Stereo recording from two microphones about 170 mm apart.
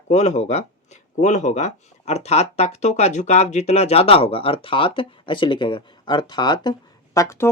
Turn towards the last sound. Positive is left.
turn(degrees=15)  # may be behind; listen again after turning